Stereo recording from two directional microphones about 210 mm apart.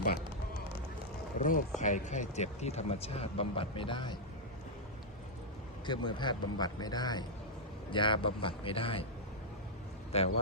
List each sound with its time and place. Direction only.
1.5 s speech: 40° left (ahead or behind); by 4.2 s 20° left (ahead or behind)
5.8 s a man's voice: 20° left (ahead or behind)
10.1 s a man's voice: 30° left (ahead or behind)